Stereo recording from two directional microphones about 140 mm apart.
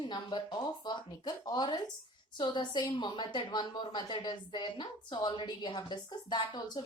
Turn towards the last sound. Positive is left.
turn(degrees=30)  # may be behind; listen again after turning